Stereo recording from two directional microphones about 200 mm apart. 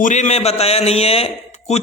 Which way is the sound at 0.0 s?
35° left (ahead or behind).